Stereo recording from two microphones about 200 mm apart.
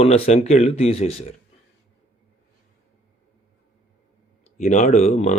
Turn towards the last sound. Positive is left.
turn(degrees=35)  # may be behind; listen again after turning